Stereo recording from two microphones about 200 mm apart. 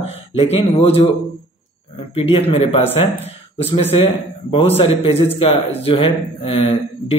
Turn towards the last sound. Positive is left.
turn(degrees=30)  # may be behind; listen again after turning